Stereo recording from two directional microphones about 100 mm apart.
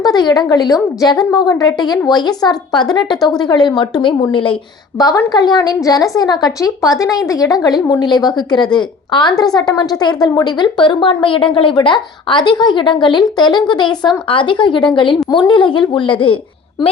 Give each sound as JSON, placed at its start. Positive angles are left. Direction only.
{"t": 0.0, "sound": "a woman's voice", "side_deg": 45}
{"t": 4.9, "sound": "a woman's voice", "side_deg": 40}